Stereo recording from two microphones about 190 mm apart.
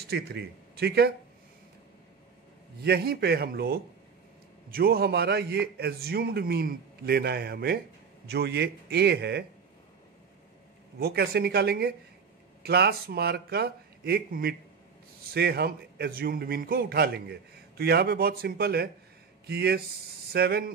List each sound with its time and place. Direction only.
0.1 s a man's voice: 60° right (ahead or behind)
2.8 s a man's voice: 60° right (ahead or behind)
11.0 s a man's voice: 55° right (ahead or behind)